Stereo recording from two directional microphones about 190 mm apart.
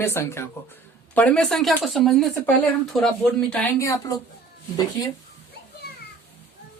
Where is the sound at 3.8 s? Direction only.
15° left (ahead or behind).